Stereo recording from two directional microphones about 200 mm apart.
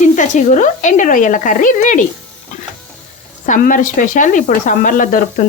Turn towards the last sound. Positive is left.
turn(degrees=40)  # may be behind; listen again after turning